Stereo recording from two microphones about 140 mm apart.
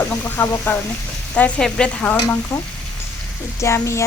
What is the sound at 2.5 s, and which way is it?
Speech, 20° left (ahead or behind).